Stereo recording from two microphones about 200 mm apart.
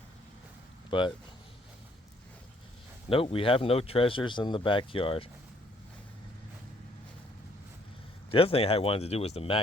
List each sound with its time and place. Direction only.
0.9 s speech: 25° left (ahead or behind)
3.1 s speech: 25° left (ahead or behind)
8.3 s speech: 30° left (ahead or behind)